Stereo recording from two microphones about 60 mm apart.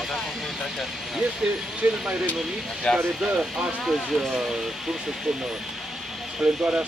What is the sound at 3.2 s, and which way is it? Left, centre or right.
Speech, centre.